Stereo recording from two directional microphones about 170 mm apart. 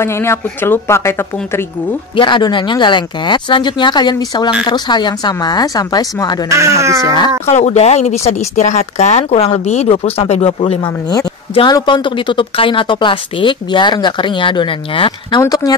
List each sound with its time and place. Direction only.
0.0 s a woman's voice: 15° left (ahead or behind)
2.1 s speech: 30° left (ahead or behind)
6.5 s speech: 15° right (ahead or behind)
7.1 s speech: 25° left (ahead or behind)
7.4 s a woman's voice: 40° left (ahead or behind); by 15.7 s 20° left (ahead or behind)